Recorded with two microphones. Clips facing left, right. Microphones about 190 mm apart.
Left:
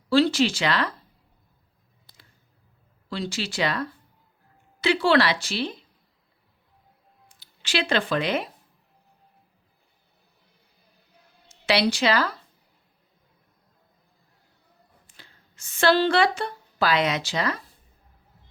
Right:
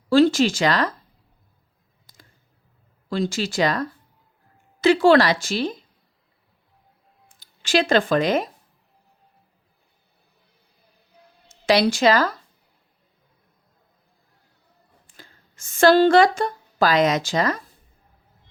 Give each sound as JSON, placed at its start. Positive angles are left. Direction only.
{"t": 0.1, "sound": "speech", "side_deg": -50}
{"t": 3.1, "sound": "a woman's voice", "side_deg": -45}
{"t": 7.3, "sound": "speech", "side_deg": -45}
{"t": 11.6, "sound": "a woman's voice", "side_deg": -45}
{"t": 15.1, "sound": "a woman's voice", "side_deg": -45}